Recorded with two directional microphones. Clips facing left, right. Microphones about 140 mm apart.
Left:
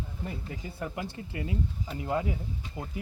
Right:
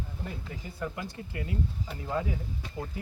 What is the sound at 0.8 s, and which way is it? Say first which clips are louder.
Speech: even; 25° left (ahead or behind).